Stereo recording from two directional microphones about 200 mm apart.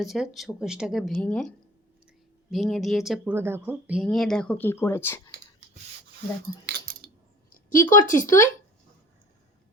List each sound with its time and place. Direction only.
0.0 s speech: centre (ahead or behind)
6.7 s coin: 50° right (ahead or behind)
7.5 s a sound: 40° left (ahead or behind)
8.1 s speech: 15° left (ahead or behind)